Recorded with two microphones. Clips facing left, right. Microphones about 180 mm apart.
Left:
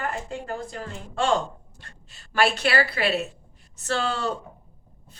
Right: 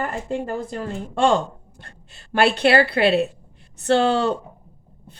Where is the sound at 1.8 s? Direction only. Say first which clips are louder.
Right 4 dB; 55° right (ahead or behind).